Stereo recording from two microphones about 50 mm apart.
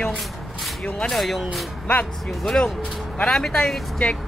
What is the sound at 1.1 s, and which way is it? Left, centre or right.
Speech, centre.